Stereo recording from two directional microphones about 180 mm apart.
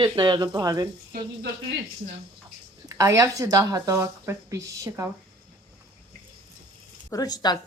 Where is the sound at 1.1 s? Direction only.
60° right (ahead or behind).